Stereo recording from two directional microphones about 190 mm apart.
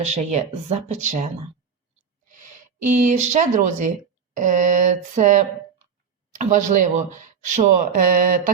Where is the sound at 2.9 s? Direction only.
40° right (ahead or behind).